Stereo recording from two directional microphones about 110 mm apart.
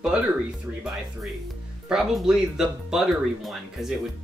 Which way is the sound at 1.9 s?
5° right (ahead or behind).